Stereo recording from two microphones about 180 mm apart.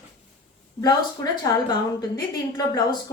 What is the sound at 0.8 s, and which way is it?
Speech, 20° left (ahead or behind).